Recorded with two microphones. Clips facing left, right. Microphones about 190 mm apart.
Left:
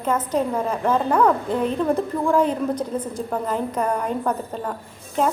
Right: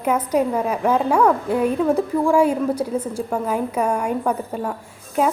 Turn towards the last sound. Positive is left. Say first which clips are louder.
# right 2 dB
turn(degrees=-10)  # may be behind; listen again after turning